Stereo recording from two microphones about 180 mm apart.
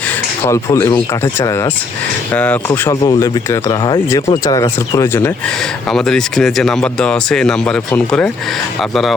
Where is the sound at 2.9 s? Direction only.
20° left (ahead or behind).